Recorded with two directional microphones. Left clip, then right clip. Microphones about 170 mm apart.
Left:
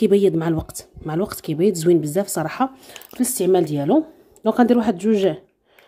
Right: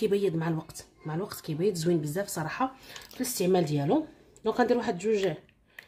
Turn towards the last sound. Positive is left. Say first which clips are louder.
# left 8 dB
turn(degrees=40)  # may be behind; listen again after turning